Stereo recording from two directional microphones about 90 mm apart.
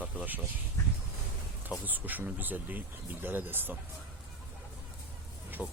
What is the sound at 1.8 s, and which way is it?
Speech, 20° right (ahead or behind).